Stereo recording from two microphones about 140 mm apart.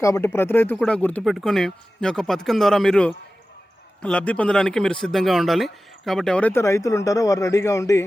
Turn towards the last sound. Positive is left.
turn(degrees=20)  # may be behind; listen again after turning